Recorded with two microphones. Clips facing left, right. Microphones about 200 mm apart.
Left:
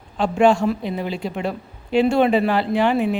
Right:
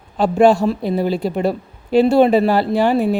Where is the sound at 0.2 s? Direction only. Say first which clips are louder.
Right 4 dB; 35° right (ahead or behind).